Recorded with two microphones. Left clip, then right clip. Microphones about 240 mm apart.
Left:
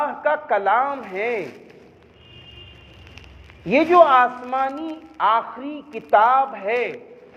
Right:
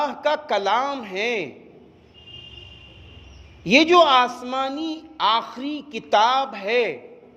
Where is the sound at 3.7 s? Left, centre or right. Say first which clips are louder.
Left 1 dB; right.